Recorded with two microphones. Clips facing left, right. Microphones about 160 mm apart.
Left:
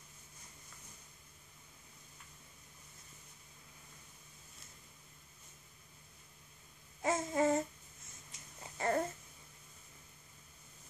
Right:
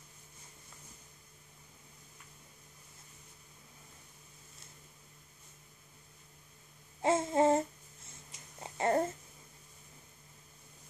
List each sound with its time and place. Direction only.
7.0 s babbling: 25° right (ahead or behind)
8.7 s babbling: 30° right (ahead or behind)